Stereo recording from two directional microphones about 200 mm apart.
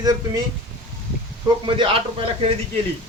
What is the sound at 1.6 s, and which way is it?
Speech, 25° right (ahead or behind).